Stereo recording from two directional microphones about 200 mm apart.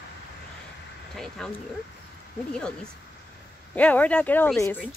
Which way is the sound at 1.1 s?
5° left (ahead or behind).